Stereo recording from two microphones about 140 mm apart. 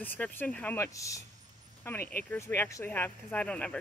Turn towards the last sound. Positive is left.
turn(degrees=5)  # may be behind; listen again after turning